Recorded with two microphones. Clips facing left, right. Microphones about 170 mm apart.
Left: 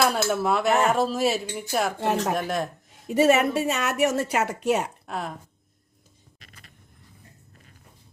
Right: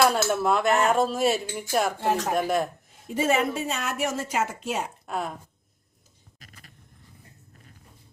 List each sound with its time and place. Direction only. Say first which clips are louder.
0.0 s speech: right 1 dB; centre (ahead or behind)
3.1 s speech: left 5 dB; 70° left (ahead or behind)
5.0 s speech: right 1 dB; centre (ahead or behind)